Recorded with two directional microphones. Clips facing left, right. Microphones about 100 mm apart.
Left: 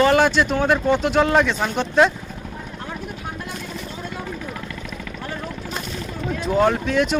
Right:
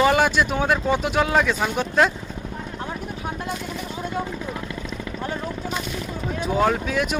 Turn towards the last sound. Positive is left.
turn(degrees=-5)  # may be behind; listen again after turning